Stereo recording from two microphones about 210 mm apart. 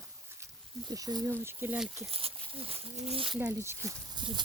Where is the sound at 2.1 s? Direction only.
25° right (ahead or behind).